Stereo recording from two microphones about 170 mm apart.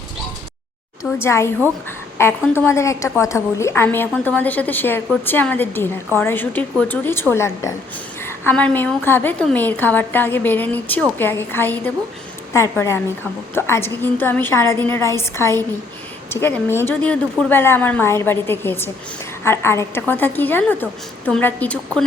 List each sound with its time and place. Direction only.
1.2 s a woman's voice: 15° left (ahead or behind)